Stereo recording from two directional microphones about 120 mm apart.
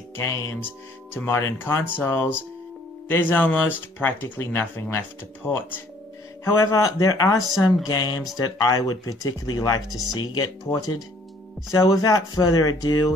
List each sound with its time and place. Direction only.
0.1 s speech: 25° left (ahead or behind)